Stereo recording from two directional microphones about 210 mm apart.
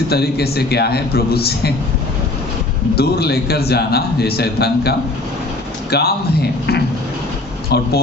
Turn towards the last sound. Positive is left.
turn(degrees=50)  # may be behind; listen again after turning